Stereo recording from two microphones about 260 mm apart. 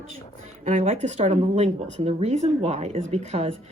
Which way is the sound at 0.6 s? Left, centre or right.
Right.